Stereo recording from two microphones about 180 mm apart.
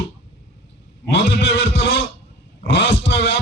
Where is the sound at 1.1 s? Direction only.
90° left.